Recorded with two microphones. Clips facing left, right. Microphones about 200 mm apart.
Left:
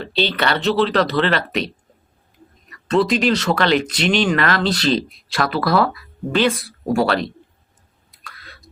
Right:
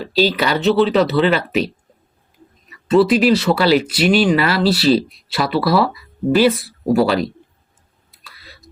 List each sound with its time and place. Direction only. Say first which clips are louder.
0.0 s speech: right 4 dB; 5° right (ahead or behind)
2.8 s speech: right 4 dB; 5° right (ahead or behind)
8.1 s a sound: left 2 dB; 5° right (ahead or behind)